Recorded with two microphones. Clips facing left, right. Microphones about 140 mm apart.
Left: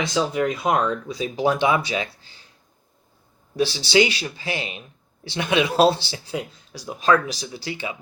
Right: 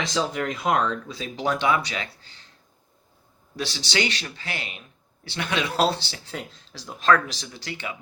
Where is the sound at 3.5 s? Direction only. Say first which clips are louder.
Left 9 dB; 15° left (ahead or behind).